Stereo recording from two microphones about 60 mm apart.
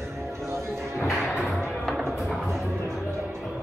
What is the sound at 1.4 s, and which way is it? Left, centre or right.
Music, centre.